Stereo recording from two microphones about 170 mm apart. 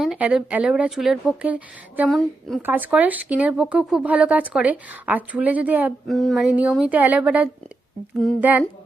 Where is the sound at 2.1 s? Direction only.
Centre (ahead or behind).